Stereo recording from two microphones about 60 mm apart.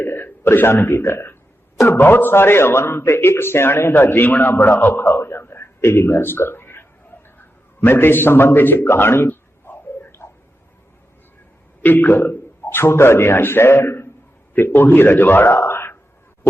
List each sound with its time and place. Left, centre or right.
0.0 s a man's voice: left
7.3 s a sound: left
11.8 s a man's voice: left